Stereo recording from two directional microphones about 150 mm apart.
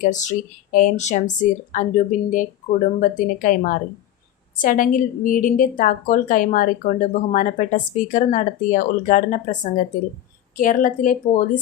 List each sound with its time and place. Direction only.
0.0 s a woman's voice: 55° left (ahead or behind)